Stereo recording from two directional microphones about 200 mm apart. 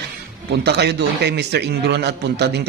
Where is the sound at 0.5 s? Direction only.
55° right (ahead or behind).